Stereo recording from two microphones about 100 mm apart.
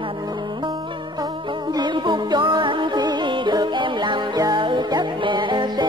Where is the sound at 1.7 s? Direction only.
50° right (ahead or behind).